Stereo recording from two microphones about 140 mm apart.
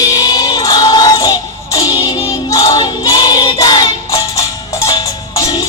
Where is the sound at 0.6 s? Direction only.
25° left (ahead or behind).